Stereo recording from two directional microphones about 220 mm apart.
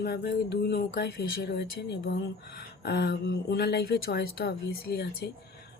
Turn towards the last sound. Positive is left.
turn(degrees=45)  # may be behind; listen again after turning